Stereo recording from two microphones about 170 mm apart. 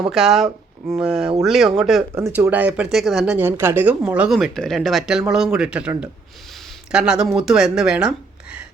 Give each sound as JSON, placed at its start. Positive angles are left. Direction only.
{"t": 0.1, "sound": "speech", "side_deg": -5}
{"t": 2.1, "sound": "speech", "side_deg": -15}